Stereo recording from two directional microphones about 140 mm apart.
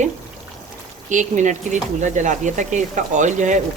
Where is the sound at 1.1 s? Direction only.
60° right (ahead or behind).